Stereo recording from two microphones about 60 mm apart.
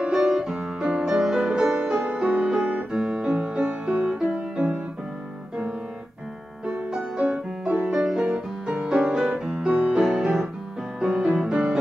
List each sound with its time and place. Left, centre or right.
0.1 s music: centre
2.0 s music: right
6.6 s music: centre
7.3 s music: right